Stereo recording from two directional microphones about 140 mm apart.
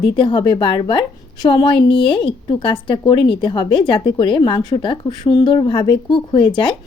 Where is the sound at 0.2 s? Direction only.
35° left (ahead or behind).